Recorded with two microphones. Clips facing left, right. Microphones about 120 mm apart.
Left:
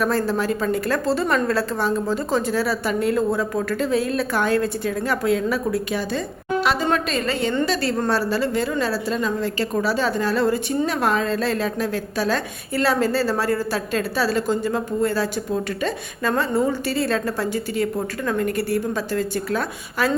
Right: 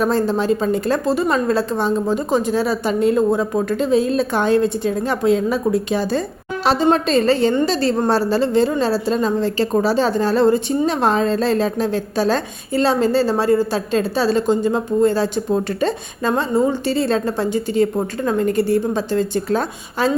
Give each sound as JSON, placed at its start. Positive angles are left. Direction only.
{"t": 0.0, "sound": "a woman's voice", "side_deg": -20}